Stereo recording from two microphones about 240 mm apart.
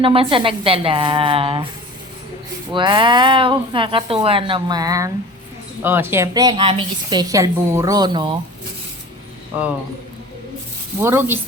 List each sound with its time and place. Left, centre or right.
0.0 s speech: right
2.7 s a woman's voice: centre
11.0 s a woman's voice: centre